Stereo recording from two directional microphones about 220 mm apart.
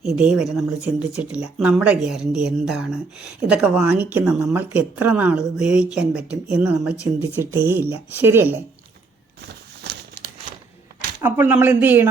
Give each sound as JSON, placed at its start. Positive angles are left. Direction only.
{"t": 0.0, "sound": "speech", "side_deg": 0}
{"t": 9.9, "sound": "crumpling", "side_deg": -50}
{"t": 11.2, "sound": "speech", "side_deg": -10}